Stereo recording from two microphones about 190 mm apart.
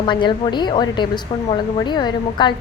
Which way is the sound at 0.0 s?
25° left (ahead or behind).